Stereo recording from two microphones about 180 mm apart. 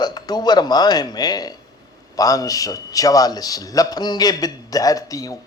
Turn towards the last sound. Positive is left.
turn(degrees=20)  # may be behind; listen again after turning